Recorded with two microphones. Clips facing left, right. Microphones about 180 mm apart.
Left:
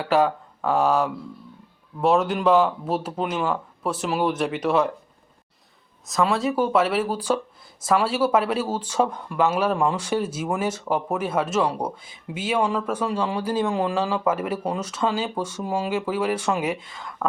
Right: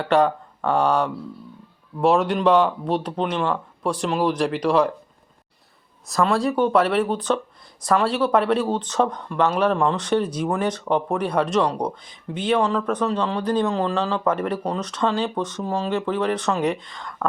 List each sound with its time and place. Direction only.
0.0 s speech: 5° left (ahead or behind)
6.1 s speech: centre (ahead or behind)